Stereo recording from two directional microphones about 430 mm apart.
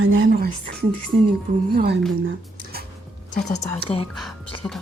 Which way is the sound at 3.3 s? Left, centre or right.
Centre.